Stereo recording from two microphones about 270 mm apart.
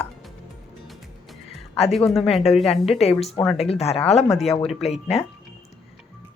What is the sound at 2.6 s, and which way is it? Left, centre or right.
A woman's voice, left.